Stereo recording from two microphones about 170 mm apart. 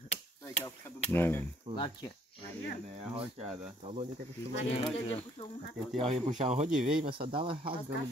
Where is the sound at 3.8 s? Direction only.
35° right (ahead or behind).